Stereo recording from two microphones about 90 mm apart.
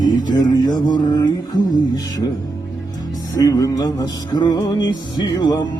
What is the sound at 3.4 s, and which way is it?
Music, 40° left (ahead or behind).